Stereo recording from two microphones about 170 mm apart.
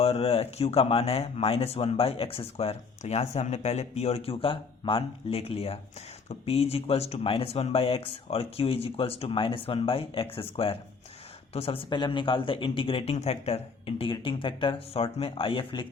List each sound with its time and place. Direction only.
0.0 s speech: 35° left (ahead or behind)